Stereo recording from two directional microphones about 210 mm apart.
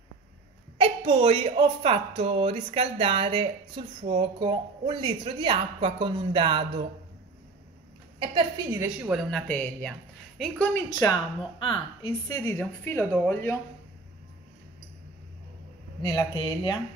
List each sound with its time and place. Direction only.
0.7 s speech: 25° right (ahead or behind)
8.7 s speech: 5° right (ahead or behind)
10.7 s a woman's voice: 15° left (ahead or behind)
16.0 s speech: 20° left (ahead or behind)